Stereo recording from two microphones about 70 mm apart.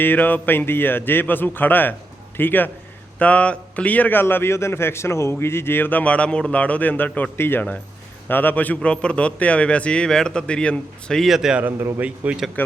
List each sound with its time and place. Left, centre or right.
0.0 s a man's voice: left
11.2 s speech: centre
11.9 s speech: right
12.6 s a man's voice: left